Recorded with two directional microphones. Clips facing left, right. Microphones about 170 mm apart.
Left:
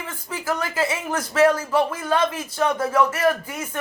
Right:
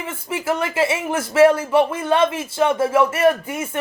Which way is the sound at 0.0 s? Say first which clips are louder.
Right 5 dB; 25° right (ahead or behind).